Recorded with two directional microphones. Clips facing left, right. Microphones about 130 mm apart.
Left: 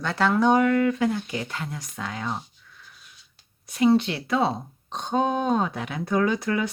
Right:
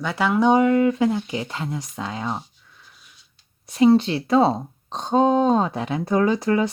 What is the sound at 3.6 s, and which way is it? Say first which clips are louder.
Speech: right 4 dB; 30° right (ahead or behind).